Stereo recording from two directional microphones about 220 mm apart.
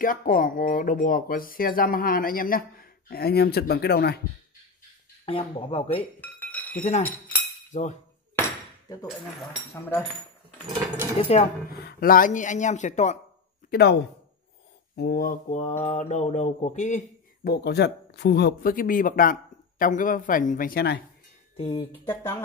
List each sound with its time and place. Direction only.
0.0 s speech: 40° left (ahead or behind)
5.2 s speech: 25° left (ahead or behind)
6.2 s chink: 5° left (ahead or behind)
6.8 s speech: 30° left (ahead or behind)
8.4 s dishes: 15° left (ahead or behind)
11.3 s speech: 30° left (ahead or behind)
11.7 s speech: 45° left (ahead or behind)
13.7 s speech: 45° left (ahead or behind)
15.0 s speech: 45° left (ahead or behind)
17.5 s speech: 50° left (ahead or behind)
21.5 s speech: 25° left (ahead or behind)
22.0 s speech: 10° left (ahead or behind)